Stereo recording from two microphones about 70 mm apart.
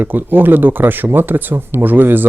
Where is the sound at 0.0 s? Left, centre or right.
Right.